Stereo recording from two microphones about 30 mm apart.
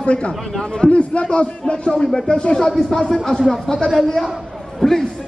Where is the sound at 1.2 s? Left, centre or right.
Left.